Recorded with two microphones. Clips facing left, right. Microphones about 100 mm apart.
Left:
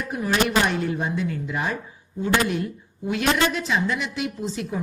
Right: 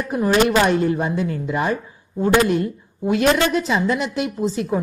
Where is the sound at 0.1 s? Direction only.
35° right (ahead or behind).